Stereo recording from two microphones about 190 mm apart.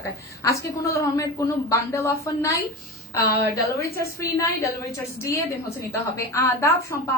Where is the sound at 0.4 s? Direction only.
15° left (ahead or behind).